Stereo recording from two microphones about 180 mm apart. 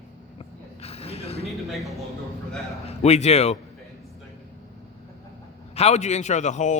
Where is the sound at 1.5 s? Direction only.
Centre (ahead or behind).